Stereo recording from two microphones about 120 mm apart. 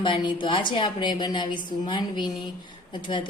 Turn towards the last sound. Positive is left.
turn(degrees=45)  # may be behind; listen again after turning